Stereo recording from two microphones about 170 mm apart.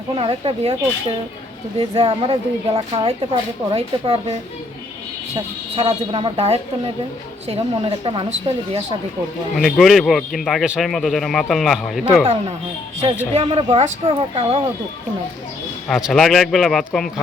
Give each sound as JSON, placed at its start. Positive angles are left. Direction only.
{"t": 0.2, "sound": "speech", "side_deg": -35}
{"t": 5.7, "sound": "speech", "side_deg": -30}
{"t": 9.6, "sound": "a man's voice", "side_deg": 0}
{"t": 13.3, "sound": "speech", "side_deg": -30}
{"t": 15.9, "sound": "a man's voice", "side_deg": 0}